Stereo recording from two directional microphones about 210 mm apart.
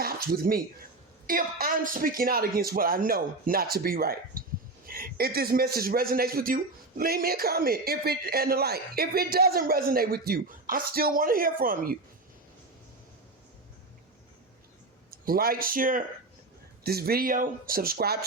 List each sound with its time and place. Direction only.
0.0 s a sound: 45° right (ahead or behind)
1.3 s a man's voice: 45° right (ahead or behind)
15.1 s a man's voice: 45° right (ahead or behind)